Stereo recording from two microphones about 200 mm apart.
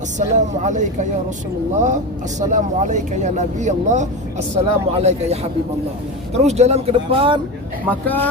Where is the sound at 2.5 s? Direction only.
35° right (ahead or behind).